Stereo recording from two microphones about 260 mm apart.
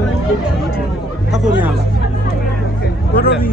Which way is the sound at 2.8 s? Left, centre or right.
Left.